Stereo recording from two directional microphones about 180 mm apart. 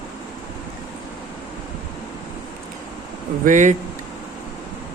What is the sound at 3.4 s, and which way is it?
Speech, 45° right (ahead or behind).